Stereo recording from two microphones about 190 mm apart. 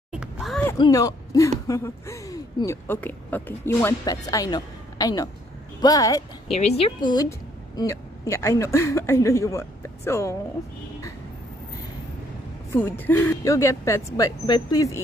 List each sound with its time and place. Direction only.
0.1 s a sound: 5° right (ahead or behind)
0.7 s speech: 20° left (ahead or behind)
6.5 s a woman's voice: 35° left (ahead or behind); by 10.3 s 15° left (ahead or behind)
12.7 s speech: 10° left (ahead or behind)